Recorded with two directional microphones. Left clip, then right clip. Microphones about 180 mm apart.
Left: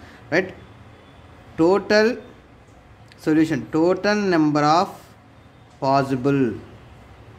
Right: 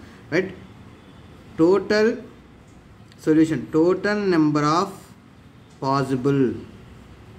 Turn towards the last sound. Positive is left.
turn(degrees=20)  # may be behind; listen again after turning